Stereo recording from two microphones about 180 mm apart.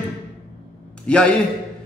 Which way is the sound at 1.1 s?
5° left (ahead or behind).